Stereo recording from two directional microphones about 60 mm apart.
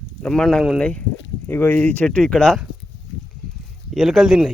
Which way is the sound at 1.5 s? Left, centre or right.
Left.